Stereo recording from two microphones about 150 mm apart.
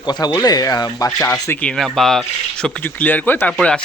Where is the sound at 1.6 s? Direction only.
5° left (ahead or behind).